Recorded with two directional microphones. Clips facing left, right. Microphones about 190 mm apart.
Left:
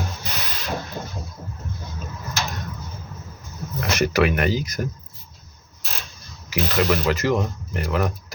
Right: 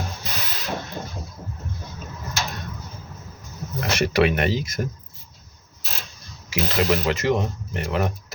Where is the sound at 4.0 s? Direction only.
30° right (ahead or behind).